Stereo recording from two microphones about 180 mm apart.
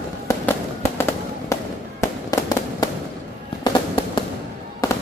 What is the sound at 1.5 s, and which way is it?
Fireworks, 15° left (ahead or behind).